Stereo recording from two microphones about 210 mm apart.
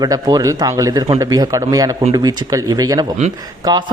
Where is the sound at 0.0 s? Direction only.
20° right (ahead or behind).